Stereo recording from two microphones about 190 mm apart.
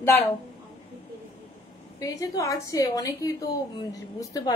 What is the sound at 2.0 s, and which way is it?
A woman's voice, 15° left (ahead or behind).